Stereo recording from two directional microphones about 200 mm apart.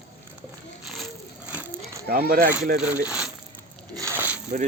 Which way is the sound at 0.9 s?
5° right (ahead or behind).